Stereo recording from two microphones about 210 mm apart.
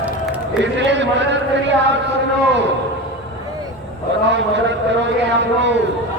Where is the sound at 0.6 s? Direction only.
55° right (ahead or behind).